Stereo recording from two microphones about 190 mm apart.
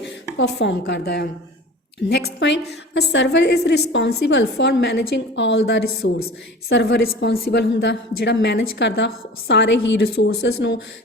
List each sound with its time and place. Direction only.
0.0 s a woman's voice: 65° left (ahead or behind)